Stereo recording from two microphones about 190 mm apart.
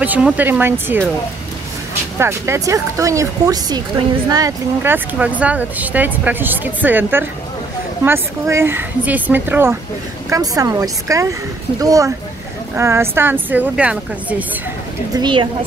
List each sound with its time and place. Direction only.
0.0 s speech: 10° right (ahead or behind)
2.1 s speech: 15° right (ahead or behind)
15.1 s a woman's voice: 25° right (ahead or behind)